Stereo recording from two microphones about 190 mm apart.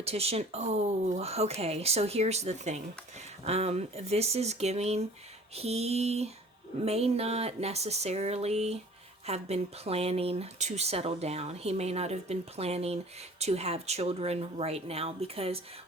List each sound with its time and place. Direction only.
0.0 s speech: 30° right (ahead or behind)